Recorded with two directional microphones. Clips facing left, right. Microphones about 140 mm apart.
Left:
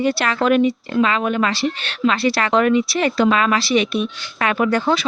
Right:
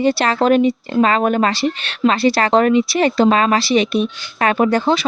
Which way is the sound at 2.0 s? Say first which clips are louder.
Right 3 dB; 55° right (ahead or behind).